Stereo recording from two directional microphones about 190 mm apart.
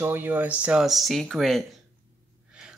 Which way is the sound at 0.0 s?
10° right (ahead or behind).